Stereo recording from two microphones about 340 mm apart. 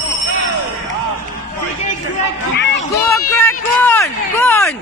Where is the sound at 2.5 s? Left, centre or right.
Left.